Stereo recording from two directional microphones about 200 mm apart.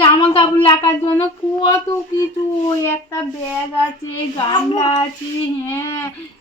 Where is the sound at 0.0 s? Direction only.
25° left (ahead or behind).